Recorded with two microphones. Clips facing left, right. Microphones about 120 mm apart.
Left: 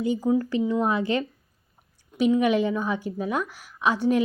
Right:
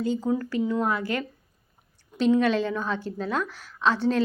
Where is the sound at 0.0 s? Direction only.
15° left (ahead or behind).